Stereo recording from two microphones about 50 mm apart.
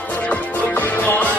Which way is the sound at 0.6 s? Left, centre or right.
Left.